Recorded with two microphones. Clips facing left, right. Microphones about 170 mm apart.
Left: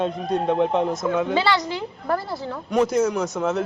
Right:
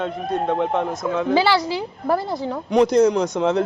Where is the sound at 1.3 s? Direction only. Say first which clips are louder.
Right 3 dB; 10° right (ahead or behind).